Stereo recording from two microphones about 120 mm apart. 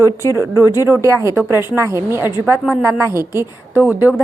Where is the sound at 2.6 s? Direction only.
5° right (ahead or behind).